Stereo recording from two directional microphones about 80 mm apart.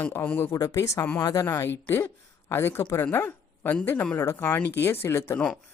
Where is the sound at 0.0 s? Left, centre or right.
Left.